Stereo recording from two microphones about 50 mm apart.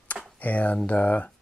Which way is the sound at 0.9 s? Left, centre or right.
Left.